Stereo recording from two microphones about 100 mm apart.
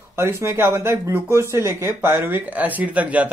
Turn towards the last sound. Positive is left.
turn(degrees=-15)  # may be behind; listen again after turning